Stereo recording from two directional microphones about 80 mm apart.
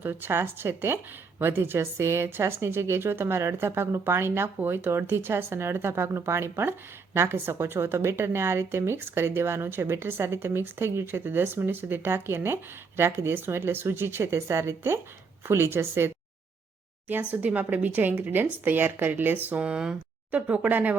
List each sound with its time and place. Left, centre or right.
0.0 s a woman's voice: right
17.3 s speech: centre